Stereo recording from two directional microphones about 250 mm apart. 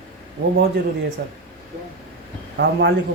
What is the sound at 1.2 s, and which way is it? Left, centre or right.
Speech, right.